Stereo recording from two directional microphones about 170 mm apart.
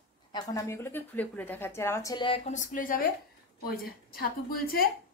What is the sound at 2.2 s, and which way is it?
A woman's voice, 45° left (ahead or behind).